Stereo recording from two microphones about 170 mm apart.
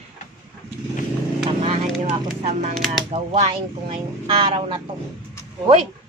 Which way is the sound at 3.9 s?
30° right (ahead or behind).